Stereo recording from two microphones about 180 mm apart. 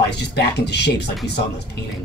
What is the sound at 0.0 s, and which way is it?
Speech, 65° left (ahead or behind).